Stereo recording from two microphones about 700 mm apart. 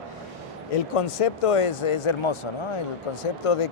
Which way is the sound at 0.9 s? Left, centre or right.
Left.